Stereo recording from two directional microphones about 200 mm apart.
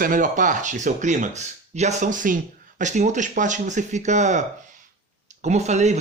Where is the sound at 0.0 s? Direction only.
45° right (ahead or behind).